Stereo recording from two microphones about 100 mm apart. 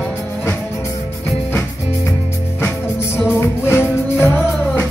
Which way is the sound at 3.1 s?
25° left (ahead or behind).